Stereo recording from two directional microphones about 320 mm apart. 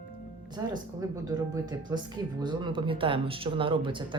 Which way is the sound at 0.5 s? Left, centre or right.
Centre.